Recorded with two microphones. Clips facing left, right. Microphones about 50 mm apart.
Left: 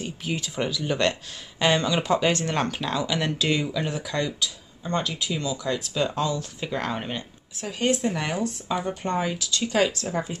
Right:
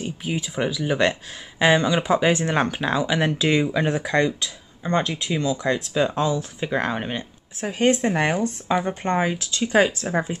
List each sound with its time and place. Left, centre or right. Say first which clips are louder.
0.0 s speech: right 3 dB; centre
3.7 s speech: right 6 dB; right
5.9 s speech: right 3 dB; centre
7.6 s speech: right 4 dB; right